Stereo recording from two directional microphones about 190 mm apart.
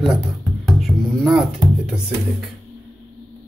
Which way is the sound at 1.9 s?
5° right (ahead or behind).